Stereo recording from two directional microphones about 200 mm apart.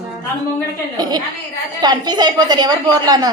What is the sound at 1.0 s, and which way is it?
A woman's voice, 20° right (ahead or behind).